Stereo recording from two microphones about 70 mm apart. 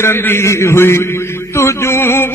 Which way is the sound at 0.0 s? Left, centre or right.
Left.